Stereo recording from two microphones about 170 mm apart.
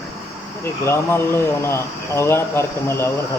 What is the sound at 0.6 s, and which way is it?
Speech, 15° left (ahead or behind).